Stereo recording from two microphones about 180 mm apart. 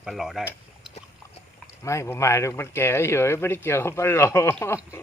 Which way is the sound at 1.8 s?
15° left (ahead or behind).